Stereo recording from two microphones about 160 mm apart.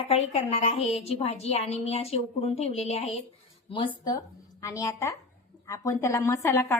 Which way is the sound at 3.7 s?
25° left (ahead or behind).